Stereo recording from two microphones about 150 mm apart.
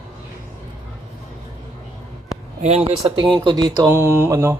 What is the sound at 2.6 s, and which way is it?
Speech, 45° right (ahead or behind).